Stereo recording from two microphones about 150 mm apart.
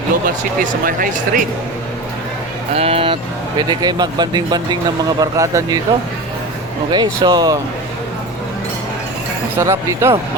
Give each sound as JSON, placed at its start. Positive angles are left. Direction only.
{"t": 0.9, "sound": "speech", "side_deg": -70}
{"t": 2.7, "sound": "speech", "side_deg": -40}
{"t": 3.6, "sound": "speech", "side_deg": -25}
{"t": 6.9, "sound": "speech", "side_deg": -30}
{"t": 9.6, "sound": "speech", "side_deg": -20}